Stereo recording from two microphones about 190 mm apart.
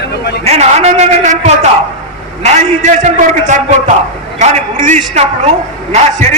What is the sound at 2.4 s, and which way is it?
A man's voice, 35° right (ahead or behind).